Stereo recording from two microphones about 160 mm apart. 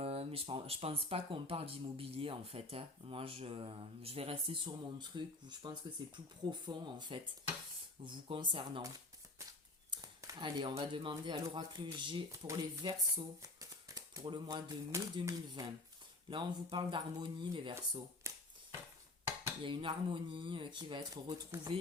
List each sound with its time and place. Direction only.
0.0 s speech: 35° right (ahead or behind)
18.3 s a sound: 15° right (ahead or behind)
19.6 s speech: 30° right (ahead or behind)